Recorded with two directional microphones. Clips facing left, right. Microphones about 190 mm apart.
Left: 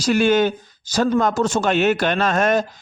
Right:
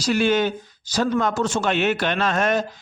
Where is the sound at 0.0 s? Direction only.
50° left (ahead or behind).